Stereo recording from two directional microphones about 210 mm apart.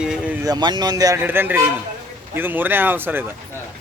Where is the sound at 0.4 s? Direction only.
20° right (ahead or behind).